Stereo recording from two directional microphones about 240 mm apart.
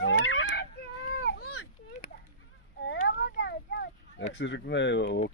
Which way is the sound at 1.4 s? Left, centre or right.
Left.